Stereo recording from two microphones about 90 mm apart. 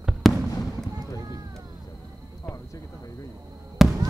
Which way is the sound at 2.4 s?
35° left (ahead or behind).